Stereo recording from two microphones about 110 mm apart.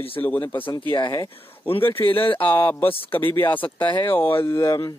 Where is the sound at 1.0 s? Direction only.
35° left (ahead or behind).